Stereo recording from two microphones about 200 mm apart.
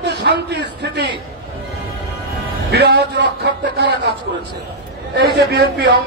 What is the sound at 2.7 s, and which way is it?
A man's voice, 60° right (ahead or behind).